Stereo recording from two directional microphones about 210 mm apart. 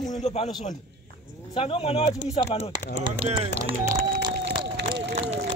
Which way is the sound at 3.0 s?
25° right (ahead or behind).